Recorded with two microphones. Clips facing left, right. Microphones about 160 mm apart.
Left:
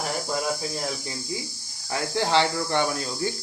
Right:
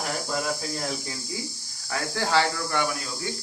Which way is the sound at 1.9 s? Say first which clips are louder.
Left 2 dB; 20° left (ahead or behind).